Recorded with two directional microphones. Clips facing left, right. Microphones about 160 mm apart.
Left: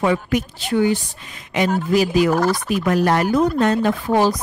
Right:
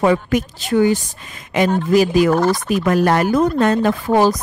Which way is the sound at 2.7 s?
50° right (ahead or behind).